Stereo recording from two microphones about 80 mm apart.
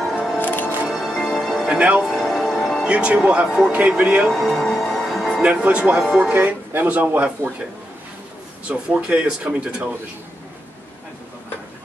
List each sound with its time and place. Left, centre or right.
0.4 s music: left
0.8 s music: centre
1.7 s speech: centre
2.0 s music: centre
2.9 s speech: centre
4.3 s music: centre
5.4 s speech: centre
8.6 s speech: centre